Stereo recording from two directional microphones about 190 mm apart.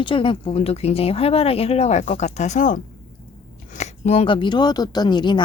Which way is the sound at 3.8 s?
30° left (ahead or behind).